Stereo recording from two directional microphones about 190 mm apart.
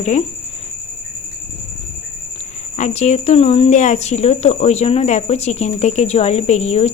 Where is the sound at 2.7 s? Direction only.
35° left (ahead or behind).